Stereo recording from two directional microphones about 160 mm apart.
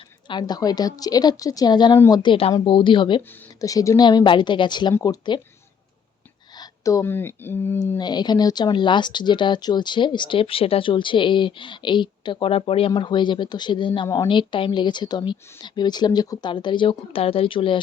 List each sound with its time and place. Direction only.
0.3 s speech: 25° left (ahead or behind)
6.6 s speech: 20° left (ahead or behind)
7.9 s speech: 25° left (ahead or behind)